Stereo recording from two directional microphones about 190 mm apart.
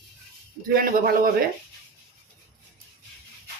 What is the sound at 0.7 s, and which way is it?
Speech, 50° right (ahead or behind).